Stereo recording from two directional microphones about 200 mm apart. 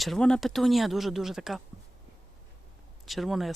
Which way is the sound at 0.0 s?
Centre (ahead or behind).